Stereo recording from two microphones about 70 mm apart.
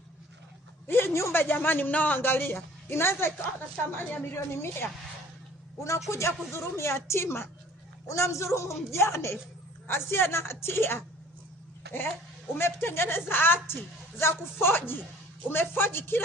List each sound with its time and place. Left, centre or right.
0.9 s a man's voice: left
12.5 s a man's voice: left